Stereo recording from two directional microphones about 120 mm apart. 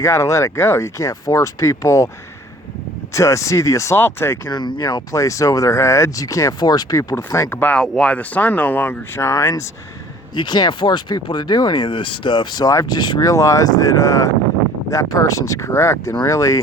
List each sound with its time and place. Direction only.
0.0 s speech: 25° left (ahead or behind)
3.2 s speech: 25° left (ahead or behind)
4.4 s speech: 35° left (ahead or behind)
5.1 s speech: 25° left (ahead or behind)
7.5 s speech: 15° left (ahead or behind)
10.3 s speech: 40° left (ahead or behind)